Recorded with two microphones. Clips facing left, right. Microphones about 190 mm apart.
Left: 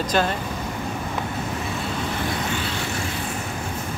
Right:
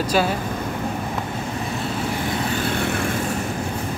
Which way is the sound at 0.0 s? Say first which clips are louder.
Right 2 dB; 10° right (ahead or behind).